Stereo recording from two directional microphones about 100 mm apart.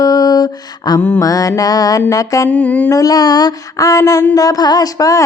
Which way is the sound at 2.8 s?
35° left (ahead or behind).